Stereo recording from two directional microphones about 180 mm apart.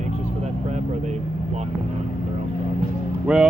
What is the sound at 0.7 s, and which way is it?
Speech, 40° right (ahead or behind).